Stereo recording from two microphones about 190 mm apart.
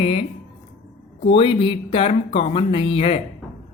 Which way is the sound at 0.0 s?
30° left (ahead or behind).